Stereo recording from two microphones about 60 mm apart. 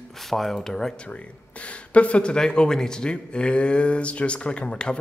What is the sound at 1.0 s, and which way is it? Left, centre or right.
Speech, left.